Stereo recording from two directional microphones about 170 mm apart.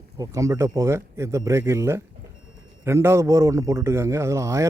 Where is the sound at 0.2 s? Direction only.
20° right (ahead or behind).